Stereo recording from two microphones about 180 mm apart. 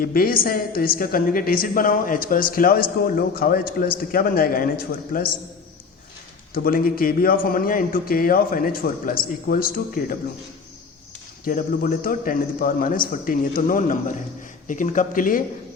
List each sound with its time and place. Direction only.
0.0 s a woman's voice: 55° left (ahead or behind)
6.5 s a woman's voice: 50° left (ahead or behind)
11.4 s a woman's voice: 50° left (ahead or behind)